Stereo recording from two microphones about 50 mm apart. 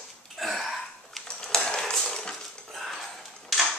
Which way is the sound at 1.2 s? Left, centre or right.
Centre.